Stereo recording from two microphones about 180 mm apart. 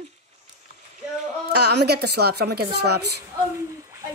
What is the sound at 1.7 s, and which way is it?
A woman's voice, 65° right (ahead or behind).